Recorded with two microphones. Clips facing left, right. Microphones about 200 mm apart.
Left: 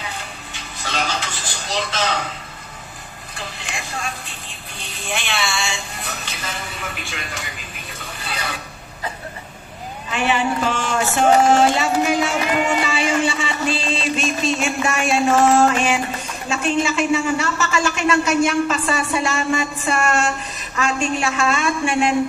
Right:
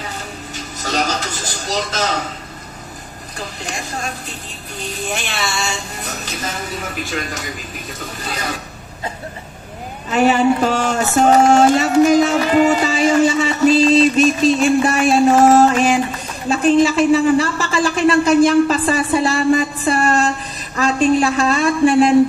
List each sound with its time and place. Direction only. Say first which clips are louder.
0.6 s a sound: right 5 dB; 40° right (ahead or behind)
3.3 s a woman's voice: right 4 dB; 40° right (ahead or behind)
10.0 s a man's voice: right 7 dB; 40° right (ahead or behind)